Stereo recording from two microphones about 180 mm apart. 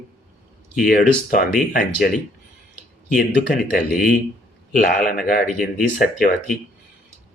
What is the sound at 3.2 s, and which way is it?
Speech, 50° left (ahead or behind).